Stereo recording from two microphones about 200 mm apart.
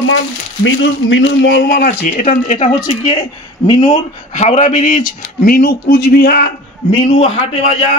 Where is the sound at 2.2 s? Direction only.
35° left (ahead or behind).